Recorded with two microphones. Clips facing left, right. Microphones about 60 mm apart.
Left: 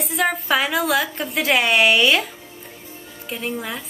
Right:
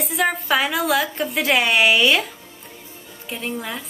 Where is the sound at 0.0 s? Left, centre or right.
Centre.